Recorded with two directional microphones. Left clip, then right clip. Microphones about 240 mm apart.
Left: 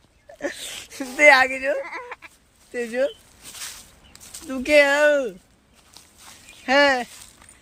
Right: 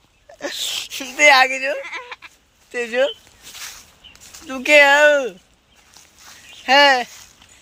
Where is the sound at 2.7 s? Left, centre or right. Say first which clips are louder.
Right 5 dB; centre.